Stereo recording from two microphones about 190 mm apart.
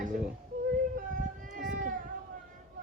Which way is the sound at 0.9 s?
45° right (ahead or behind).